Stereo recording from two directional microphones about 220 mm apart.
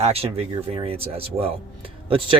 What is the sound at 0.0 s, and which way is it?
Speech, 25° right (ahead or behind).